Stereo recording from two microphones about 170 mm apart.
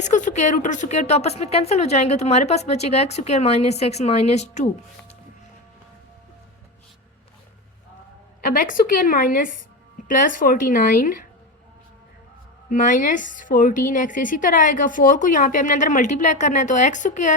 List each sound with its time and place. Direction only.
0.0 s a woman's voice: 45° left (ahead or behind)
8.4 s a woman's voice: 55° left (ahead or behind)
12.6 s a woman's voice: 50° left (ahead or behind)